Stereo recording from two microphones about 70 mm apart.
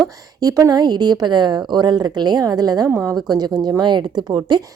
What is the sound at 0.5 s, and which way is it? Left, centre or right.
A woman's voice, right.